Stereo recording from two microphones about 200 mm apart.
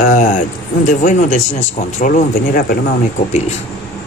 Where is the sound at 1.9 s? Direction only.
40° left (ahead or behind).